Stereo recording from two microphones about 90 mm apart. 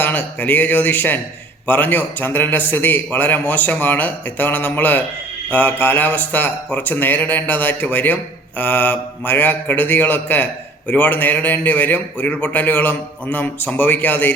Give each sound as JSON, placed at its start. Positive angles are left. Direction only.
{"t": 0.0, "sound": "a man's voice", "side_deg": 20}